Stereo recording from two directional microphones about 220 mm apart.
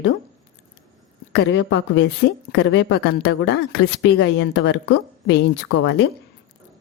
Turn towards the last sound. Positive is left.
turn(degrees=55)  # may be behind; listen again after turning